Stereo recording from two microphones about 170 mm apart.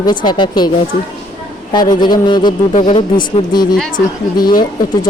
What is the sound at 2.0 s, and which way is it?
Speech, 25° left (ahead or behind).